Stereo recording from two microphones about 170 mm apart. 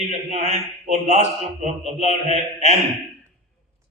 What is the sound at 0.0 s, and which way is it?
Speech, 40° right (ahead or behind).